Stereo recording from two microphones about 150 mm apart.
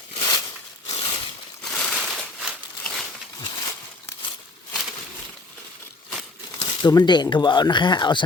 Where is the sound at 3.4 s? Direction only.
25° left (ahead or behind).